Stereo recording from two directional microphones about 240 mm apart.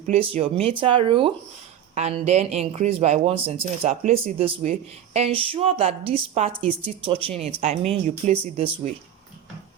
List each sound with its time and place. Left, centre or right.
0.1 s speech: right